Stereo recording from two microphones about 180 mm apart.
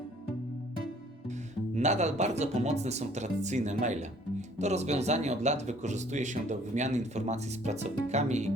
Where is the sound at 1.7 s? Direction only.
40° right (ahead or behind).